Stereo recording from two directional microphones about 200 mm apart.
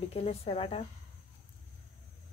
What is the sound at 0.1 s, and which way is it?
Speech, 30° left (ahead or behind).